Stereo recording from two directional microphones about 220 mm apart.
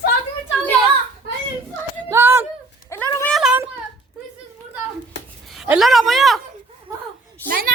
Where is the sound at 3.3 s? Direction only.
5° right (ahead or behind).